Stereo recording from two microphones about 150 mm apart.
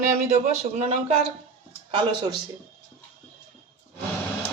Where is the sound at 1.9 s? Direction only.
30° right (ahead or behind).